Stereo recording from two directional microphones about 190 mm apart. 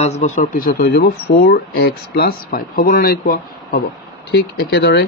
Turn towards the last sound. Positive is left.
turn(degrees=60)  # may be behind; listen again after turning